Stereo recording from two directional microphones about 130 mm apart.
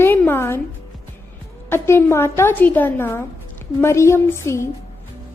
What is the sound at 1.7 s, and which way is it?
A woman's voice, 20° left (ahead or behind).